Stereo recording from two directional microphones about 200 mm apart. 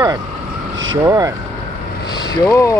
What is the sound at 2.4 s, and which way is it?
Speech, 15° left (ahead or behind).